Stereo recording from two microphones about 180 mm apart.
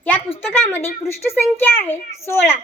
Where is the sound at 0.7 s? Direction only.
15° left (ahead or behind).